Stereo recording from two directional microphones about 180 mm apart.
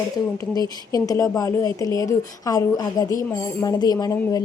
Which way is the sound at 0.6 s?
20° left (ahead or behind).